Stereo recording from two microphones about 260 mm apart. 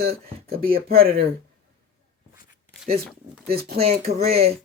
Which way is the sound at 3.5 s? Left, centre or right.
Right.